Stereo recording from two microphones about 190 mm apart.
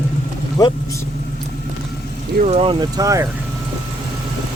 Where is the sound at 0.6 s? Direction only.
20° left (ahead or behind).